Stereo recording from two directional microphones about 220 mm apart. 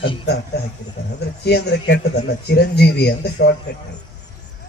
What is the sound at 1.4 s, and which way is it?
Speech, 50° left (ahead or behind).